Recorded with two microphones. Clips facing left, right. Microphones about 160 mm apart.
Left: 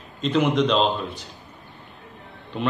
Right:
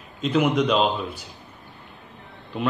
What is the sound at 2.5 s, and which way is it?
Speech, centre (ahead or behind).